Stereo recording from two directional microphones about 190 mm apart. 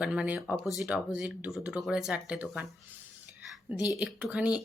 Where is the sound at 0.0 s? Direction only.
5° right (ahead or behind).